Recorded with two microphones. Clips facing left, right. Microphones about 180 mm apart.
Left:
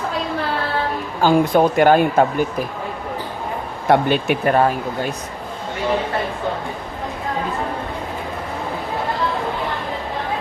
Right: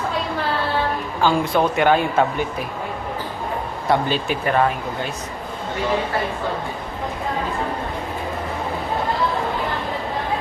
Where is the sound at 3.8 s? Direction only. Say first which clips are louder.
Left 5 dB; 55° left (ahead or behind).